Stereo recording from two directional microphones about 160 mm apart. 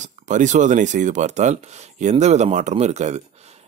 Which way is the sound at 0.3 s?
50° right (ahead or behind).